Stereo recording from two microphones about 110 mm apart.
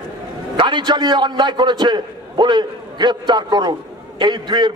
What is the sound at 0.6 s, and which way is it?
A man's voice, 45° right (ahead or behind).